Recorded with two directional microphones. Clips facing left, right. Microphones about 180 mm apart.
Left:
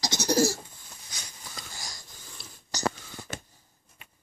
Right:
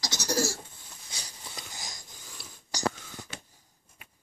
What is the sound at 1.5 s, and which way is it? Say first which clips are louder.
Wheeze: left 1 dB; 20° right (ahead or behind).